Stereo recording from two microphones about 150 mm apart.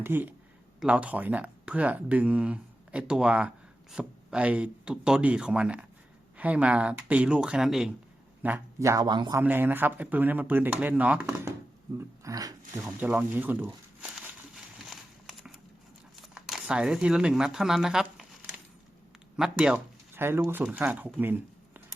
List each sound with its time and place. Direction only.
0.0 s a man's voice: 15° right (ahead or behind); by 9.4 s 30° right (ahead or behind)
9.4 s speech: 15° right (ahead or behind)
11.9 s a sound: 20° right (ahead or behind)
13.0 s speech: 10° right (ahead or behind)
14.5 s a sound: centre (ahead or behind)
16.1 s speech: centre (ahead or behind)
19.4 s speech: 5° right (ahead or behind)